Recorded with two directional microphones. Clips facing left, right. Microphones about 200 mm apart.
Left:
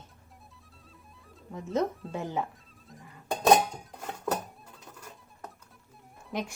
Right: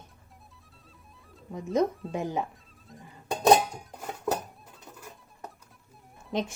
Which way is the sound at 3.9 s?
5° right (ahead or behind).